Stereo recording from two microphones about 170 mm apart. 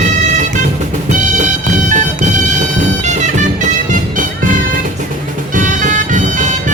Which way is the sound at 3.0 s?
45° right (ahead or behind).